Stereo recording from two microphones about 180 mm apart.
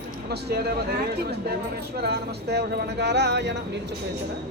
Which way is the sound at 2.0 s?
65° right (ahead or behind).